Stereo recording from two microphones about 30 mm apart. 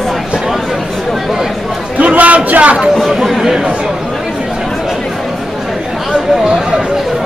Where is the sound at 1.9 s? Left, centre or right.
Right.